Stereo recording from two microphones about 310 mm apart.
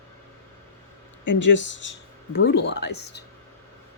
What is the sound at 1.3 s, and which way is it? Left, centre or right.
Speech, left.